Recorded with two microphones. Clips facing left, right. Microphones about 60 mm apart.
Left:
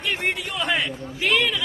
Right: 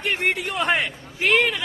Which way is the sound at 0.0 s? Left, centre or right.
Right.